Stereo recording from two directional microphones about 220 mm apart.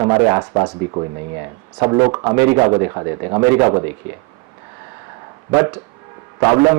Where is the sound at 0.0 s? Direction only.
15° right (ahead or behind).